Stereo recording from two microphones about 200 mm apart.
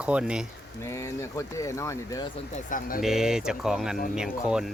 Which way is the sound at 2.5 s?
40° left (ahead or behind).